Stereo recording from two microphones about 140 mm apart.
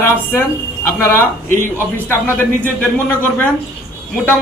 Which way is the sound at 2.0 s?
15° left (ahead or behind).